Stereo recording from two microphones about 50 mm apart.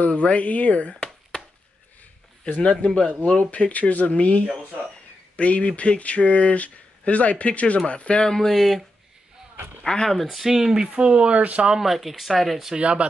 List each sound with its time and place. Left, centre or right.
0.0 s speech: left
2.4 s speech: left
8.3 s speech: centre
9.8 s speech: centre
10.2 s speech: centre
10.8 s speech: right
11.7 s speech: centre
12.7 s speech: right